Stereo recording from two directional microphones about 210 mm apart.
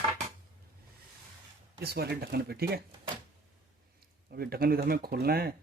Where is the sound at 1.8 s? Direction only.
50° right (ahead or behind).